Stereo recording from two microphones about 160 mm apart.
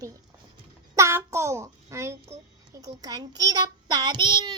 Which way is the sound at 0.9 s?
15° right (ahead or behind).